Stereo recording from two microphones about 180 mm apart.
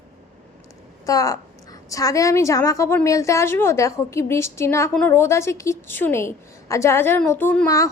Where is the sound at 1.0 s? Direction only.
20° left (ahead or behind).